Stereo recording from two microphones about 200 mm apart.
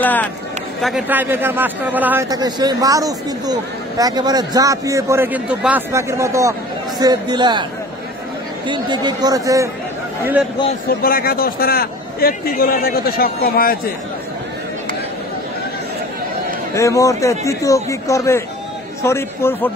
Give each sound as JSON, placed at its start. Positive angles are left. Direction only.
{"t": 0.0, "sound": "speech", "side_deg": 10}
{"t": 0.8, "sound": "speech", "side_deg": -5}
{"t": 8.6, "sound": "speech", "side_deg": -20}
{"t": 11.0, "sound": "a man's voice", "side_deg": 45}
{"t": 16.7, "sound": "speech", "side_deg": 15}